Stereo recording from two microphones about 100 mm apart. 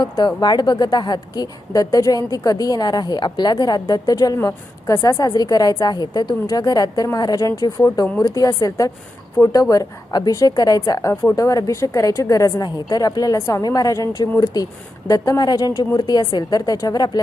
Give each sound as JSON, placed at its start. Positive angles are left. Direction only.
{"t": 0.0, "sound": "a woman's voice", "side_deg": 45}